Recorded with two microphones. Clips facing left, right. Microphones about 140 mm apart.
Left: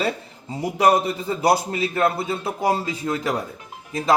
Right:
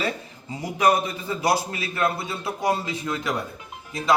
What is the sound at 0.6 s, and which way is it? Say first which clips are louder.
A man's voice: left 3 dB; 40° left (ahead or behind).